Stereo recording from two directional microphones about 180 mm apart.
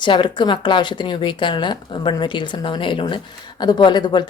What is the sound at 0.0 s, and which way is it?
A woman's voice, 25° left (ahead or behind).